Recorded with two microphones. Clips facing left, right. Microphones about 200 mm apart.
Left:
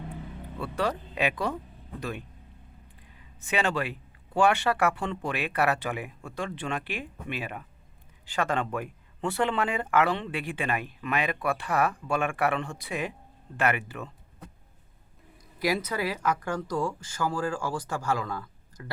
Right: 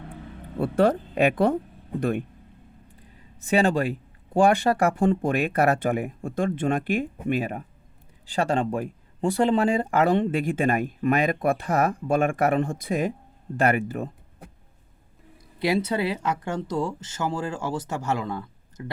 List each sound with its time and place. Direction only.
0.5 s speech: 50° right (ahead or behind)
3.4 s speech: 40° right (ahead or behind)
15.5 s speech: 25° right (ahead or behind)